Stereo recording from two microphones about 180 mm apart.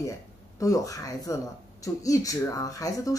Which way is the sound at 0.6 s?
20° left (ahead or behind).